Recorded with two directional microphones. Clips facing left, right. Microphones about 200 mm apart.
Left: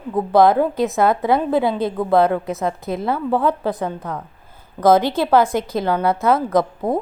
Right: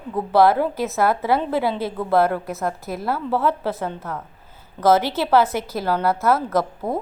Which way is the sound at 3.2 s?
15° left (ahead or behind).